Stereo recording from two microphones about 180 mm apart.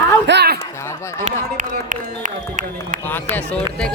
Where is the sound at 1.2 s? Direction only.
45° right (ahead or behind).